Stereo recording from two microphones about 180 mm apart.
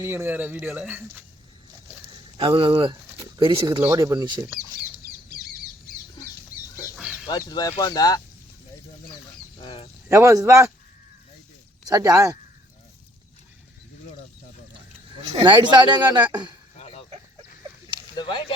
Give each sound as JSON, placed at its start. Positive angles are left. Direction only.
{"t": 0.0, "sound": "speech", "side_deg": -15}
{"t": 2.4, "sound": "speech", "side_deg": -30}
{"t": 6.9, "sound": "a sound", "side_deg": -5}
{"t": 7.3, "sound": "speech", "side_deg": 20}
{"t": 10.1, "sound": "speech", "side_deg": -15}
{"t": 11.9, "sound": "speech", "side_deg": -20}
{"t": 15.4, "sound": "speech", "side_deg": -25}
{"t": 16.7, "sound": "a sound", "side_deg": 30}
{"t": 18.2, "sound": "speech", "side_deg": 25}